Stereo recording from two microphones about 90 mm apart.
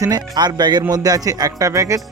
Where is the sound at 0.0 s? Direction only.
50° right (ahead or behind).